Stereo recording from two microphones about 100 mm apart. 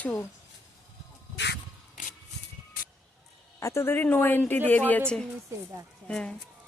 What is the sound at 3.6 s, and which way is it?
Speech, 30° left (ahead or behind).